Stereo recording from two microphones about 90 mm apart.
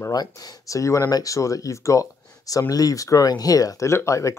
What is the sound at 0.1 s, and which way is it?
Speech, 45° left (ahead or behind).